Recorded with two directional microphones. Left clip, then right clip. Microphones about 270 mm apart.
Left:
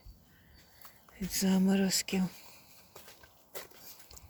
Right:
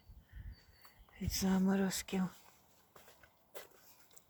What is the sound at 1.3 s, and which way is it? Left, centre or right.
Speech, centre.